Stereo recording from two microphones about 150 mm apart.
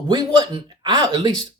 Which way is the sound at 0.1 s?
30° right (ahead or behind).